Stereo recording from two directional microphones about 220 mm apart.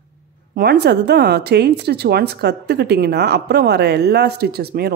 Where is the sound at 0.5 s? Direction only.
50° right (ahead or behind).